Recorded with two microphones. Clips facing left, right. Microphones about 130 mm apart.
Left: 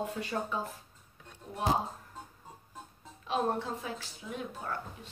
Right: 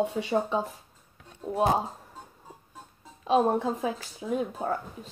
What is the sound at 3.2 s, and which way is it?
Speech, 40° right (ahead or behind).